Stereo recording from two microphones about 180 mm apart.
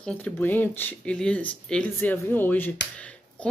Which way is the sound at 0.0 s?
10° left (ahead or behind).